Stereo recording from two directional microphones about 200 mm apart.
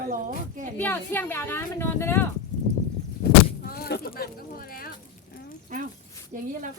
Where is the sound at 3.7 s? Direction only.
50° left (ahead or behind).